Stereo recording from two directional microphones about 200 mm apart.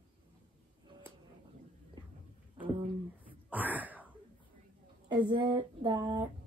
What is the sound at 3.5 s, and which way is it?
Throat clearing, 10° right (ahead or behind).